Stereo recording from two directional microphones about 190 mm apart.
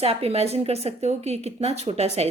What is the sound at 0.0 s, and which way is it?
A woman's voice, 30° right (ahead or behind).